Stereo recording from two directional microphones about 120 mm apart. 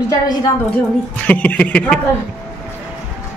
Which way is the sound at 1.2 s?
15° left (ahead or behind).